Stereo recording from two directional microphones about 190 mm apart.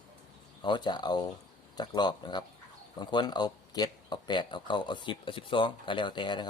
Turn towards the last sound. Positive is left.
turn(degrees=25)  # may be behind; listen again after turning